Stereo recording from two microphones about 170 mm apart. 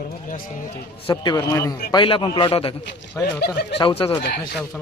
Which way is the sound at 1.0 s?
25° left (ahead or behind).